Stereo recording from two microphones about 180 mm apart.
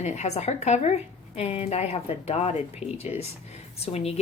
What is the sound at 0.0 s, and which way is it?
Speech, 40° left (ahead or behind).